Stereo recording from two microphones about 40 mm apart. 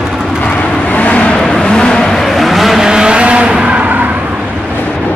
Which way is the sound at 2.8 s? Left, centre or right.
Centre.